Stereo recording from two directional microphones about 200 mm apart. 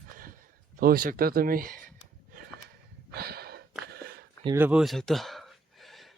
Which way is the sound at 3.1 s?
50° right (ahead or behind).